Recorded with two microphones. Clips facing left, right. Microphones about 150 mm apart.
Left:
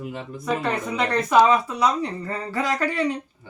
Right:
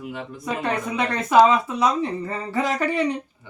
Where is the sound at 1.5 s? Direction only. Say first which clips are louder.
Even; 25° right (ahead or behind).